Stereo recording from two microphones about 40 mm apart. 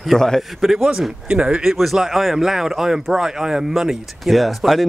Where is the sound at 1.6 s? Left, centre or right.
Centre.